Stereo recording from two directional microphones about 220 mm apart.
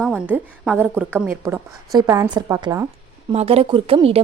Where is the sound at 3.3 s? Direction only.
25° right (ahead or behind).